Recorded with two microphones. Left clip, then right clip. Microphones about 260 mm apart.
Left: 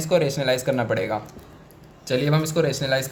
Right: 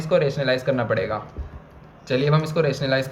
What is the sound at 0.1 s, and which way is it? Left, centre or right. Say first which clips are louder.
Speech: right 1 dB; left.